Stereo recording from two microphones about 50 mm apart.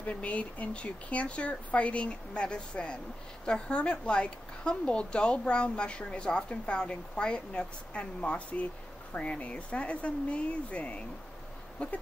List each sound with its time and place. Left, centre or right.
0.0 s a woman's voice: left